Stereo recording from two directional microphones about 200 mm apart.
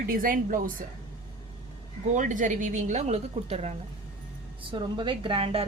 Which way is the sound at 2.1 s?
40° right (ahead or behind).